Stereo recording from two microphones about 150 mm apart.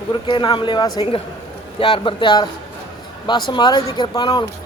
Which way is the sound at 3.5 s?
30° left (ahead or behind).